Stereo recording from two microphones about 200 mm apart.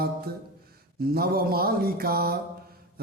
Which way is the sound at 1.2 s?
50° right (ahead or behind).